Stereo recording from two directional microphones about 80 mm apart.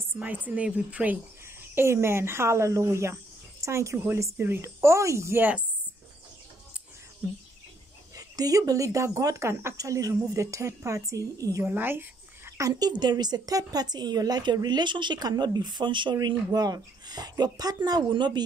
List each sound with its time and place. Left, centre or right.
0.2 s a woman's voice: centre
1.8 s speech: right
5.4 s a woman's voice: centre
8.2 s speech: right
9.8 s speech: right
11.6 s a sound: right
12.6 s speech: right
16.5 s a woman's voice: right